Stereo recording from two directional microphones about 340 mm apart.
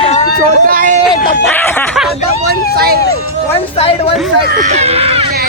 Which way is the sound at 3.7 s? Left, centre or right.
Centre.